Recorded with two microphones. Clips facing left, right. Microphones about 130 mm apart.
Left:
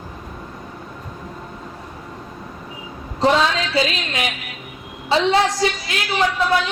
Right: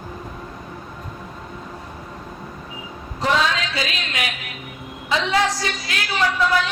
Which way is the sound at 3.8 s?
30° left (ahead or behind).